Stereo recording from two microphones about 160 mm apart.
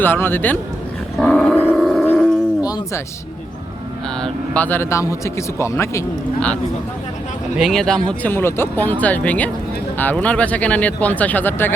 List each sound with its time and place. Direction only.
0.0 s speech: 15° left (ahead or behind)
1.2 s roar: 5° left (ahead or behind)
2.6 s a sound: 25° left (ahead or behind)
4.2 s speech: 10° left (ahead or behind)
7.5 s speech: centre (ahead or behind)